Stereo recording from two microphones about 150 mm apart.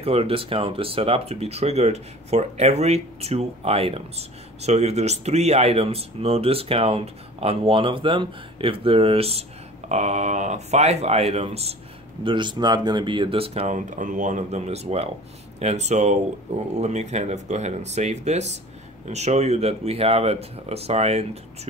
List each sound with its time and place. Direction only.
0.0 s speech: 40° right (ahead or behind)
12.3 s speech: 30° right (ahead or behind)